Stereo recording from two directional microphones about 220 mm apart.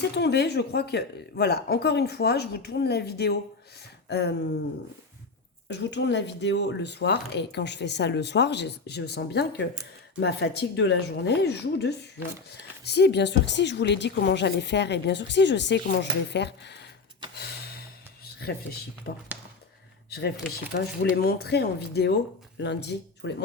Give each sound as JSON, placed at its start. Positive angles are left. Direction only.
{"t": 0.2, "sound": "speech", "side_deg": 50}
{"t": 5.6, "sound": "speech", "side_deg": 50}
{"t": 17.3, "sound": "a sound", "side_deg": 45}
{"t": 18.3, "sound": "speech", "side_deg": 45}